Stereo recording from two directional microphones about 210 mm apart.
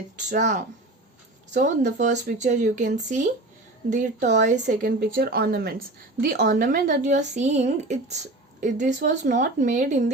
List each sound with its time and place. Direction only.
0.3 s speech: 35° right (ahead or behind)